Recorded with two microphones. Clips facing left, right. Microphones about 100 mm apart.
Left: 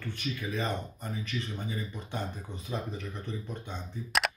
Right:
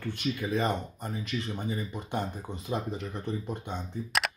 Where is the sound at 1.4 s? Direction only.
15° right (ahead or behind).